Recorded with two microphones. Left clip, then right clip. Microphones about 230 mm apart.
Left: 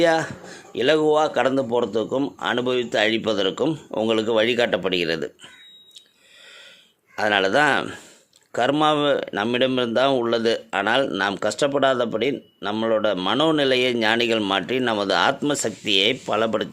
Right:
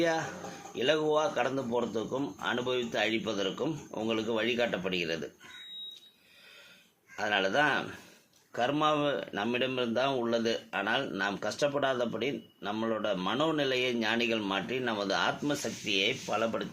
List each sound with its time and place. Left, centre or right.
0.0 s speech: left
7.2 s speech: left